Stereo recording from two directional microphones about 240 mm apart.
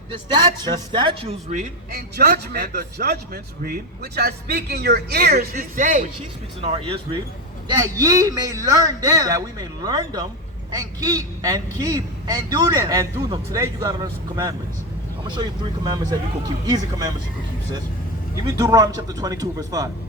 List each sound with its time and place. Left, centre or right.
0.1 s a man's voice: centre
18.4 s a man's voice: centre